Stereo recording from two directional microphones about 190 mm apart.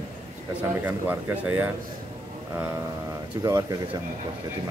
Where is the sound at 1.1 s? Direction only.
10° right (ahead or behind).